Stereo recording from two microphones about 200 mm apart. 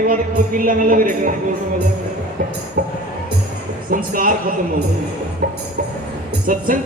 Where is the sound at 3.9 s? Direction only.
45° right (ahead or behind).